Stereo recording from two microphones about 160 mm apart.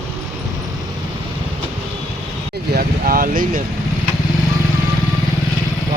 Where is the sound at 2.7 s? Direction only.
65° right (ahead or behind).